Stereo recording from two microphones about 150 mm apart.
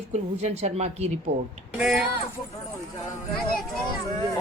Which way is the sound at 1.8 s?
5° right (ahead or behind).